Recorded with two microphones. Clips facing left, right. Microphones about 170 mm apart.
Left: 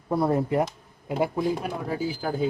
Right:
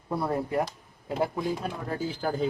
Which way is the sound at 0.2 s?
20° left (ahead or behind).